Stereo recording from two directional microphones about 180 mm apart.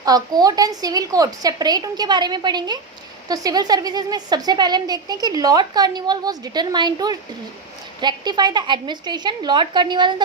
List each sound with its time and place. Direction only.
0.0 s a woman's voice: 20° right (ahead or behind)